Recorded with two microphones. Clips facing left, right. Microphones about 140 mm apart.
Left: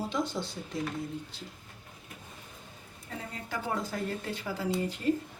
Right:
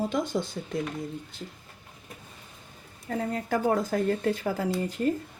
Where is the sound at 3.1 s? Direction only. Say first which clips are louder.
Right 11 dB; 50° right (ahead or behind).